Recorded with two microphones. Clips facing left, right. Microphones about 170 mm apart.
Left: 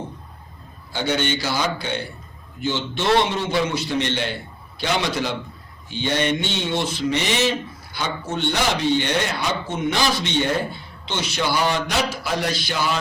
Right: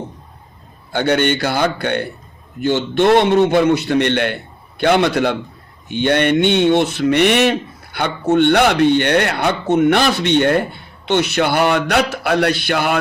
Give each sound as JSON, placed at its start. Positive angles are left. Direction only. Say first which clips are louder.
{"t": 0.9, "sound": "speech", "louder": "right 7 dB", "side_deg": -60}